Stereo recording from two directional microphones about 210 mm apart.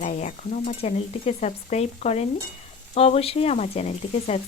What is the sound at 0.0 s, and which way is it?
Speech, 35° left (ahead or behind).